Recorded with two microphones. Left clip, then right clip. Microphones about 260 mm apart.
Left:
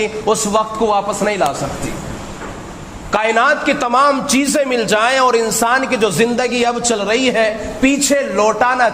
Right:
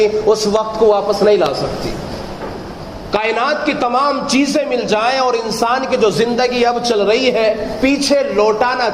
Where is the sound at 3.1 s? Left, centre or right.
Left.